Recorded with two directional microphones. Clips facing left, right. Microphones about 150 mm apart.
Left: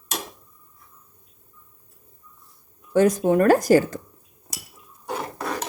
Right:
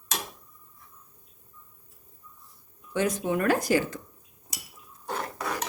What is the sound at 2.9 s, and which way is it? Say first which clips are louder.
Speech: left 9 dB; 45° left (ahead or behind).